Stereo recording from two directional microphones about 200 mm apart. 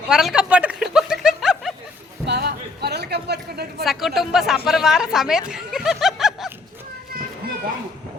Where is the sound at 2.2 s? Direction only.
55° right (ahead or behind).